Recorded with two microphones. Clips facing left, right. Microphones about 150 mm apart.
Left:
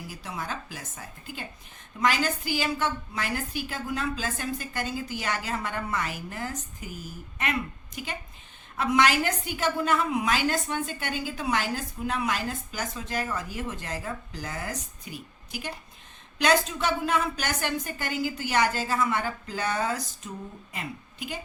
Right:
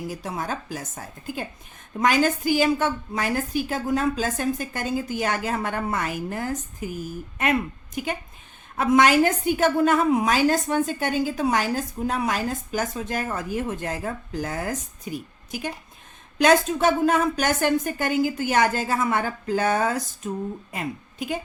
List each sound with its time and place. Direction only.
0.1 s a woman's voice: 45° right (ahead or behind)